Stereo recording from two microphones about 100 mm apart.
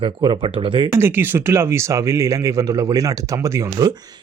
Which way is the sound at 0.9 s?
25° right (ahead or behind).